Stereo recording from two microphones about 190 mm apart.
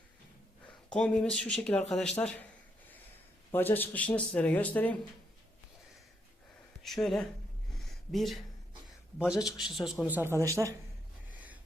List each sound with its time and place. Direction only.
0.9 s speech: 5° left (ahead or behind)
3.5 s speech: 10° left (ahead or behind)
6.8 s speech: centre (ahead or behind)
7.9 s a sound: centre (ahead or behind)
9.1 s speech: 5° right (ahead or behind)